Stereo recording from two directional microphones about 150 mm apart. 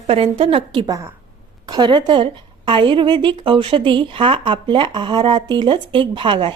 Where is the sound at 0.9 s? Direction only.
20° right (ahead or behind).